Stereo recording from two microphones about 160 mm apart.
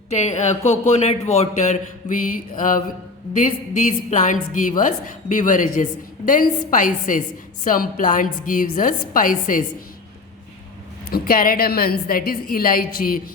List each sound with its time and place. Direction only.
0.1 s a woman's voice: 45° left (ahead or behind)
11.1 s a woman's voice: 65° left (ahead or behind)